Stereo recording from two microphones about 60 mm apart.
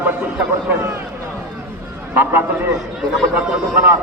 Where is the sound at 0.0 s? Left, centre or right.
Right.